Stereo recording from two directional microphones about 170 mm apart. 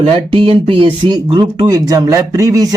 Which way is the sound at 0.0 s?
30° right (ahead or behind).